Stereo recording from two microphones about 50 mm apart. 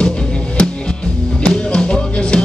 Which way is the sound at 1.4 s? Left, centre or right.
Centre.